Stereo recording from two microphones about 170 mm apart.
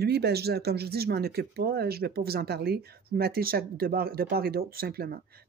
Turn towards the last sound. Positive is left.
turn(degrees=-65)  # may be behind; listen again after turning